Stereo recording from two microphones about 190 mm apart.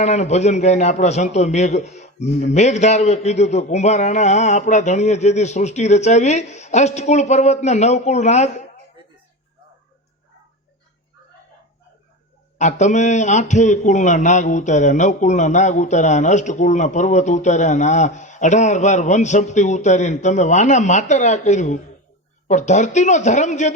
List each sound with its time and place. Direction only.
0.0 s a man's voice: 35° left (ahead or behind)
12.5 s a man's voice: 40° left (ahead or behind)